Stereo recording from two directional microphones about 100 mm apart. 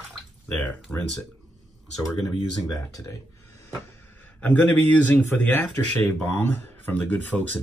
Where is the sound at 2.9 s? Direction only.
30° left (ahead or behind).